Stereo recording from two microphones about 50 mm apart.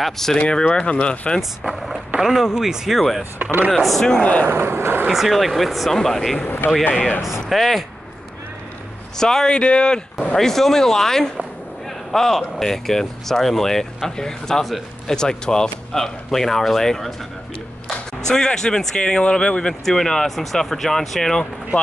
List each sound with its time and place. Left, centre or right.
0.0 s speech: centre
0.4 s speech: centre
2.1 s speech: centre
4.2 s speech: left
4.5 s speech: right
5.1 s speech: centre
6.4 s speech: left
7.4 s speech: centre
9.2 s speech: centre
19.8 s speech: centre